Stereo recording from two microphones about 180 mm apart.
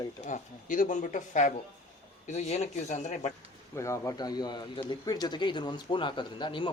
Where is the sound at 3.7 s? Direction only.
15° left (ahead or behind).